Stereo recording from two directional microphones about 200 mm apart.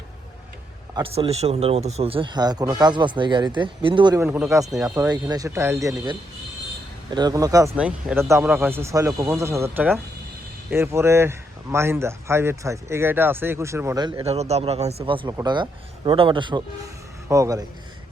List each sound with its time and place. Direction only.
0.9 s speech: 25° right (ahead or behind)
7.8 s speech: 5° right (ahead or behind)
14.3 s speech: 30° right (ahead or behind); by 17.7 s 15° right (ahead or behind)